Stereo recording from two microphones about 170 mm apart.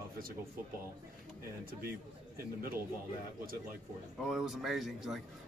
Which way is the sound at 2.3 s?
60° right (ahead or behind).